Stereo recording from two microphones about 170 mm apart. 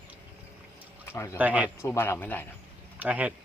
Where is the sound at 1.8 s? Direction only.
15° left (ahead or behind).